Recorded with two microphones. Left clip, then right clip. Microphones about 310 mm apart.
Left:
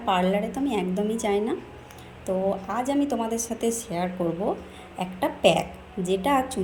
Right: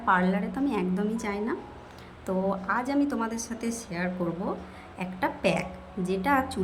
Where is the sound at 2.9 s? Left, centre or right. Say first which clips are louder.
Left 3 dB; centre.